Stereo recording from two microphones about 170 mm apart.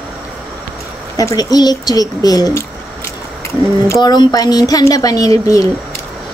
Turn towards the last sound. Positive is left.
turn(degrees=20)  # may be behind; listen again after turning